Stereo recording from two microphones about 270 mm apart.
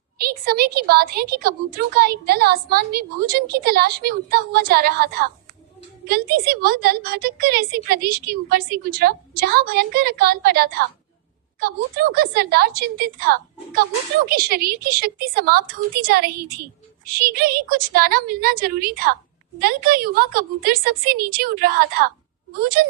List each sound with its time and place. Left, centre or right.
0.2 s a woman's voice: right